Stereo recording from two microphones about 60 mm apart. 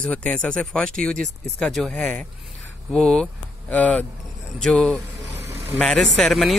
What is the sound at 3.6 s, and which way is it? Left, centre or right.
Speech, left.